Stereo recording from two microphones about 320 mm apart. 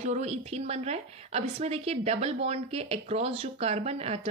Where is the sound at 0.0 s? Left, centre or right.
Right.